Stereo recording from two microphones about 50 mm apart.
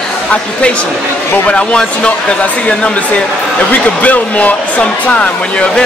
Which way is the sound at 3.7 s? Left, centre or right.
Left.